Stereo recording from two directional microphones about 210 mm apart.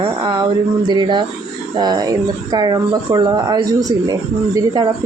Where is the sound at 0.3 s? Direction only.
20° right (ahead or behind).